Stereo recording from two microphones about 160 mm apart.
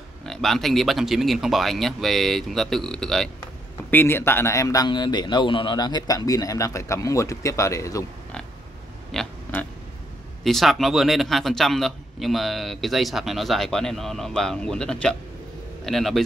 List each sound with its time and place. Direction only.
0.2 s a man's voice: centre (ahead or behind)
3.9 s speech: 15° left (ahead or behind)
9.1 s pig: 5° left (ahead or behind)
10.4 s a man's voice: centre (ahead or behind)